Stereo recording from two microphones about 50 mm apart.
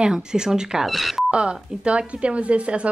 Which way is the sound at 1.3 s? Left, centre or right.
Right.